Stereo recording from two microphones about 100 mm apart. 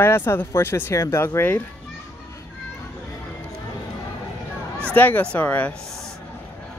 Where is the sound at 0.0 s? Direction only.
20° left (ahead or behind).